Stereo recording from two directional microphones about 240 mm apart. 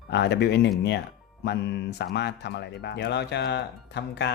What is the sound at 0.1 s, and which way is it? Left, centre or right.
Speech, left.